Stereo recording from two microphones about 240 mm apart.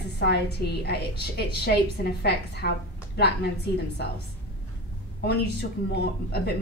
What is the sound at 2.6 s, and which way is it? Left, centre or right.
Speech, left.